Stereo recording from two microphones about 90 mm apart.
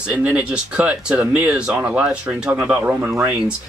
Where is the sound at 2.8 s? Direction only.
25° right (ahead or behind).